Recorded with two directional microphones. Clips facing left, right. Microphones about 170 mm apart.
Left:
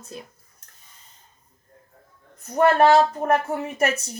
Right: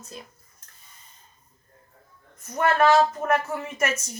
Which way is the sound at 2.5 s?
35° left (ahead or behind).